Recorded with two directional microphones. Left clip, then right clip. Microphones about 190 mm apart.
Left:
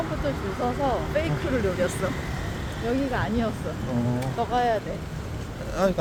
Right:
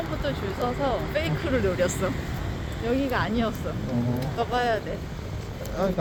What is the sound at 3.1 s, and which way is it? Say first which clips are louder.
Speech: right 1 dB; 45° right (ahead or behind).